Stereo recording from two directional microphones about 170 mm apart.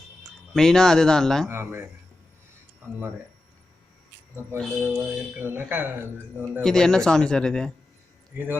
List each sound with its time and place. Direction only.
0.2 s speech: centre (ahead or behind)
1.5 s speech: 15° right (ahead or behind)
4.8 s speech: 15° right (ahead or behind)
6.6 s speech: 5° left (ahead or behind)